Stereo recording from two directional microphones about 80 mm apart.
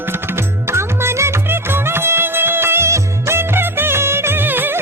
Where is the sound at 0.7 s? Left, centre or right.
Right.